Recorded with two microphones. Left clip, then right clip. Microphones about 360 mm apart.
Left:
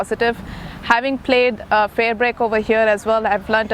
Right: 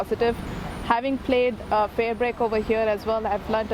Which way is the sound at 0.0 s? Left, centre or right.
Left.